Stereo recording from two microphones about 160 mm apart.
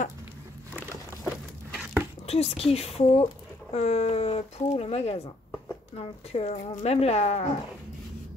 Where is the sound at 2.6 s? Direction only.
40° left (ahead or behind).